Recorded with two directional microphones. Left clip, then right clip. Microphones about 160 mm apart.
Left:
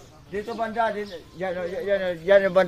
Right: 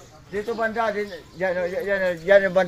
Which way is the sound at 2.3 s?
20° left (ahead or behind).